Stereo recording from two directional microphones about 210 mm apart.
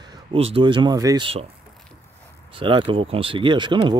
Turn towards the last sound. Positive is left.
turn(degrees=-20)  # may be behind; listen again after turning